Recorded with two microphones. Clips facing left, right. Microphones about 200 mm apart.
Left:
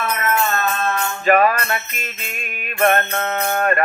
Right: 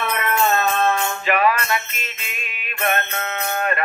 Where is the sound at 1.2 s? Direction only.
45° left (ahead or behind).